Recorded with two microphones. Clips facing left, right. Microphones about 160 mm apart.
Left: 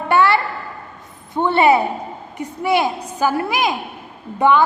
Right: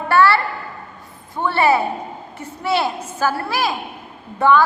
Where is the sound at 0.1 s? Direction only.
20° left (ahead or behind).